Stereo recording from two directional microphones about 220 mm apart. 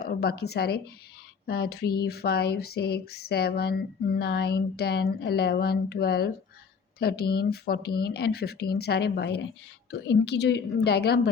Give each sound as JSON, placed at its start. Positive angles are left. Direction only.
{"t": 0.0, "sound": "speech", "side_deg": 45}